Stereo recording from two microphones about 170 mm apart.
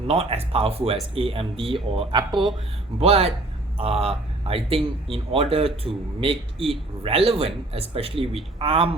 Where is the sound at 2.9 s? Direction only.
35° right (ahead or behind).